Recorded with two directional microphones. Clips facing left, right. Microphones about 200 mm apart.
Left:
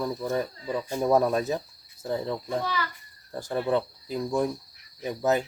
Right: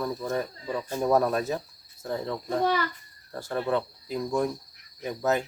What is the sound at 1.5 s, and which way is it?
Cricket, 15° left (ahead or behind).